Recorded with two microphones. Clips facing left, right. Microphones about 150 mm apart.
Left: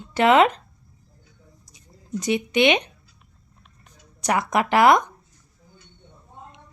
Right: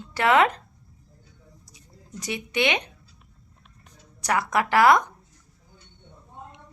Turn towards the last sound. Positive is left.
turn(degrees=20)  # may be behind; listen again after turning